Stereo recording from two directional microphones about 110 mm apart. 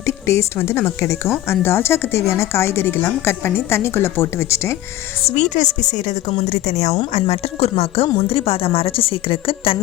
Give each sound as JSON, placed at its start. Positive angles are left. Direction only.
{"t": 0.0, "sound": "a woman's voice", "side_deg": 25}
{"t": 5.3, "sound": "a woman's voice", "side_deg": 90}
{"t": 7.1, "sound": "a woman's voice", "side_deg": 75}